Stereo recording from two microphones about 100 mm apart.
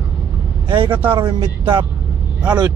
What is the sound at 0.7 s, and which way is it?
Speech, 60° right (ahead or behind).